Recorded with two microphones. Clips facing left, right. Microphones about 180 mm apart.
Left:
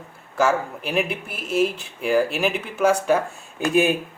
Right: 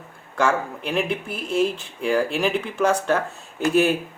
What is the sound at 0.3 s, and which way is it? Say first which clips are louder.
Speech: left 1 dB; 5° left (ahead or behind).